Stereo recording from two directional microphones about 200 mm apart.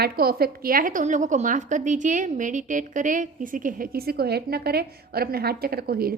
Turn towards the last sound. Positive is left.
turn(degrees=-50)  # may be behind; listen again after turning